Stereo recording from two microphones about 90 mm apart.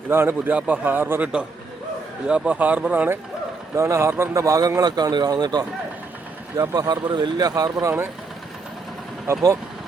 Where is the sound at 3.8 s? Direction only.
30° right (ahead or behind).